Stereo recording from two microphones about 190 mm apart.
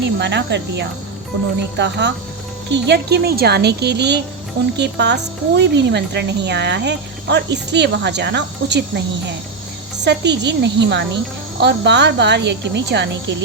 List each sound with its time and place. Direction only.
0.0 s speech: 65° right (ahead or behind)
10.0 s speech: 65° right (ahead or behind)